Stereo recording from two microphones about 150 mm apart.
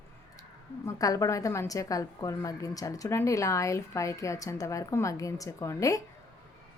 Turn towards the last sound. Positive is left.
turn(degrees=20)  # may be behind; listen again after turning